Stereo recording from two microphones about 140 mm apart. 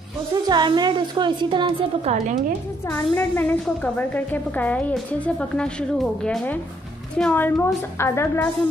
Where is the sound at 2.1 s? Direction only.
60° right (ahead or behind).